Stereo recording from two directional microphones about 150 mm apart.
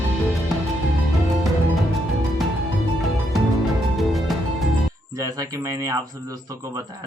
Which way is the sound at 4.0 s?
Centre (ahead or behind).